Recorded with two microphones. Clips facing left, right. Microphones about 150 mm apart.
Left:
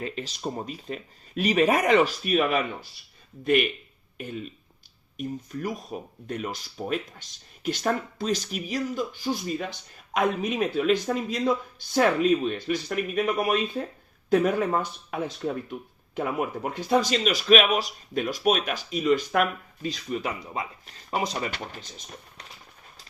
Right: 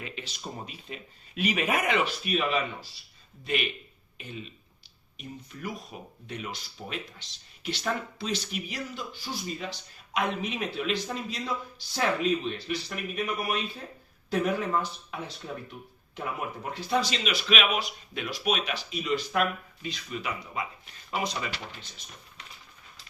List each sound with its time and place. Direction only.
0.0 s speech: 40° left (ahead or behind)
16.9 s speech: 45° left (ahead or behind)